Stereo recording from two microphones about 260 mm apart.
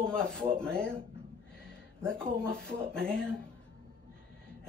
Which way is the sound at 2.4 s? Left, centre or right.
Centre.